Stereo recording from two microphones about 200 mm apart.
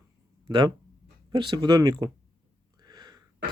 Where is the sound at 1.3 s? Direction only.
20° right (ahead or behind).